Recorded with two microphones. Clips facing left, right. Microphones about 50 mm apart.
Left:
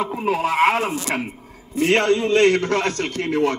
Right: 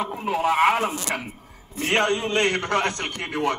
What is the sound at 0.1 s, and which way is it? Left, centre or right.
Speech, left.